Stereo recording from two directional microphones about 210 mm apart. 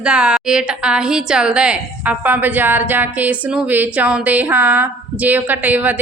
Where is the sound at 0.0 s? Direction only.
5° right (ahead or behind).